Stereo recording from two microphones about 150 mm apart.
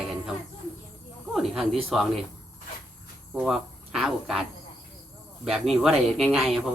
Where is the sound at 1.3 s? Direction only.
Centre (ahead or behind).